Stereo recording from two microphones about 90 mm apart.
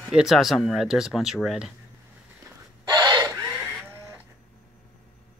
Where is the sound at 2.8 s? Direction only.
50° right (ahead or behind).